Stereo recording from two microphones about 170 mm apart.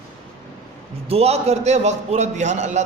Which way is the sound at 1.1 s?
35° right (ahead or behind).